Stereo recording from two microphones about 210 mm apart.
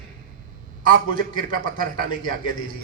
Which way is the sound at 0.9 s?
40° right (ahead or behind).